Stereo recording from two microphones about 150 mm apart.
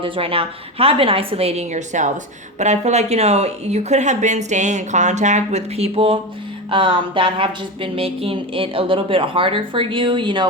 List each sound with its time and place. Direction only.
0.0 s speech: 40° right (ahead or behind)